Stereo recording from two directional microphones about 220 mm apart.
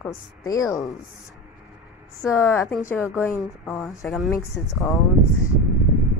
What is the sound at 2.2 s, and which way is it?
A woman's voice, 10° left (ahead or behind).